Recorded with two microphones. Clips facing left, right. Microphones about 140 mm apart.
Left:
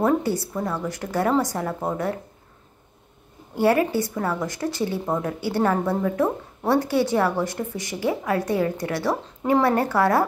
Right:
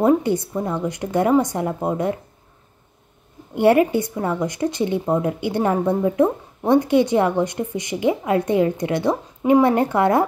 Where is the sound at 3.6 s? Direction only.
20° right (ahead or behind).